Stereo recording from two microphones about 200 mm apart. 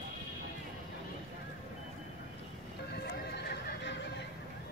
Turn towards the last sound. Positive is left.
turn(degrees=55)  # may be behind; listen again after turning